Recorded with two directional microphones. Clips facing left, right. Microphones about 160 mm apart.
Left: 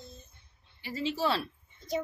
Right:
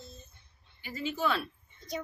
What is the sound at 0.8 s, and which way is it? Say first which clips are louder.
A woman's voice: left 2 dB; 30° left (ahead or behind).